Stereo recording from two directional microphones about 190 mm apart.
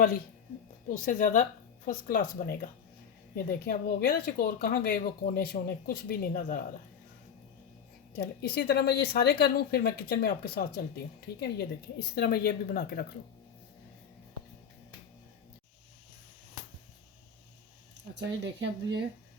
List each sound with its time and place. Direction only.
0.9 s speech: 45° left (ahead or behind)
8.1 s speech: 55° left (ahead or behind)
18.1 s speech: 65° right (ahead or behind)